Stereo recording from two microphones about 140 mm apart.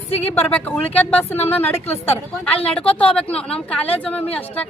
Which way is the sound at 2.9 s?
10° left (ahead or behind).